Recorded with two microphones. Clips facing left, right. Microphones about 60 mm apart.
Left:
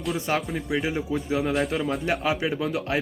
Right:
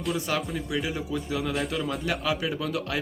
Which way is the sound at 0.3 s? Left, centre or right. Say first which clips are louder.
Left 3 dB; left.